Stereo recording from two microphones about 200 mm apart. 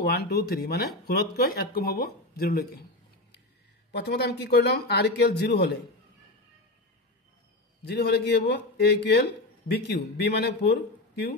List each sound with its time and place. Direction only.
0.0 s speech: 50° left (ahead or behind)
3.9 s speech: 55° left (ahead or behind)
7.8 s speech: 55° left (ahead or behind)